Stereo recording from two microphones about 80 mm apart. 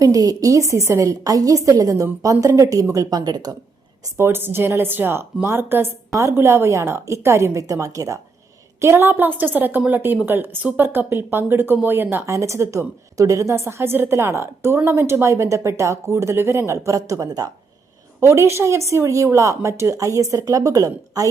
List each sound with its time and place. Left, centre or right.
0.0 s a woman's voice: right
4.0 s speech: right
8.8 s speech: right
12.1 s speech: right
18.2 s speech: right